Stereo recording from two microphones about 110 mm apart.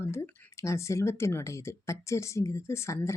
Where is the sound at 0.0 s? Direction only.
25° left (ahead or behind).